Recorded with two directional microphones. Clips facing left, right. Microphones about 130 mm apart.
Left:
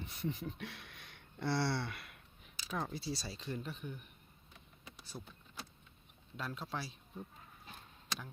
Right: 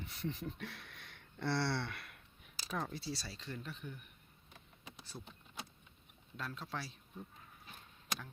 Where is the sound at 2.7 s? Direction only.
5° left (ahead or behind).